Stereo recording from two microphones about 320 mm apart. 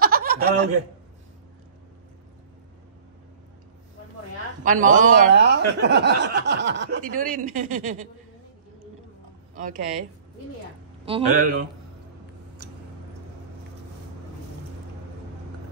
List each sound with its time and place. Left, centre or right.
0.0 s chuckle: right
4.6 s speech: right
11.1 s speech: right